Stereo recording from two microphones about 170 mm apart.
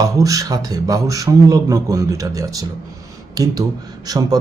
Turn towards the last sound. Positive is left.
turn(degrees=-20)  # may be behind; listen again after turning